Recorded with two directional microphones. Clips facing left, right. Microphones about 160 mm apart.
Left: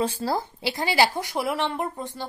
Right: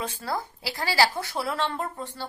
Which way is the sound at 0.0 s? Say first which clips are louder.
Left 6 dB; 30° left (ahead or behind).